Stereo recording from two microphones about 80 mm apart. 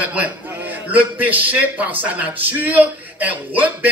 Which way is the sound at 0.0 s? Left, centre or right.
Right.